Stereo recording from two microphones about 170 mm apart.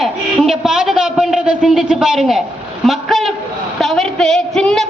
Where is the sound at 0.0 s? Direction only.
Centre (ahead or behind).